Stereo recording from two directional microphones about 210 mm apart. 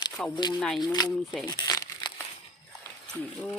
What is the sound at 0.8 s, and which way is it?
Speech, 20° left (ahead or behind).